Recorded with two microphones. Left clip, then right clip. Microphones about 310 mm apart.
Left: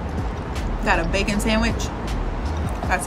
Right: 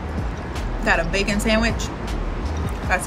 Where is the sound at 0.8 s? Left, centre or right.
Centre.